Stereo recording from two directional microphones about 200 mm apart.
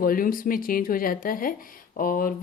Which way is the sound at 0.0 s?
45° left (ahead or behind).